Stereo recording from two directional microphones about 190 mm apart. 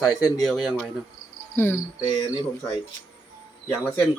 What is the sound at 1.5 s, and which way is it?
Speech, 10° left (ahead or behind).